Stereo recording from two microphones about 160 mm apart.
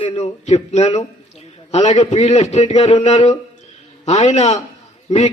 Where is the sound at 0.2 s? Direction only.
45° left (ahead or behind).